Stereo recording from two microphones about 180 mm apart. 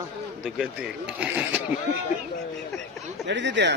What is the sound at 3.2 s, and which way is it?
Speech, 80° right.